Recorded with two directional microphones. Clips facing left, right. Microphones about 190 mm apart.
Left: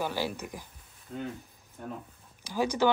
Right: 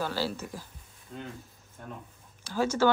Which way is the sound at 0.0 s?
15° left (ahead or behind).